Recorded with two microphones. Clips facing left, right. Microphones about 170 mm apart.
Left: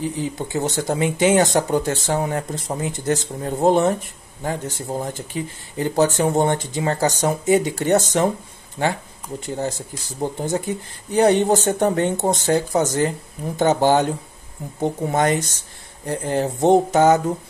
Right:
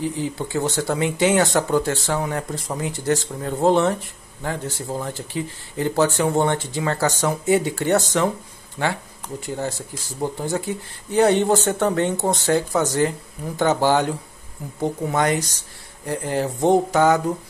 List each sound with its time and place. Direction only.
0.0 s speech: 20° left (ahead or behind)
9.6 s speech: 15° left (ahead or behind)